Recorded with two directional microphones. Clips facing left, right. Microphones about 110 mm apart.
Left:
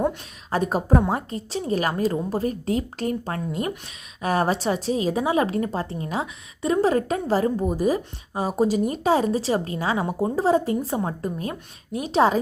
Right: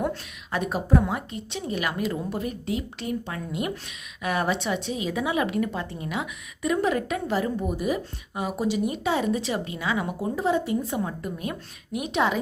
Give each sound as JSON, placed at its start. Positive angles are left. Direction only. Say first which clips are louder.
{"t": 0.5, "sound": "a woman's voice", "louder": "left 3 dB", "side_deg": 40}